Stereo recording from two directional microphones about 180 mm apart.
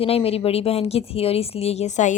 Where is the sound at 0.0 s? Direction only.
35° left (ahead or behind).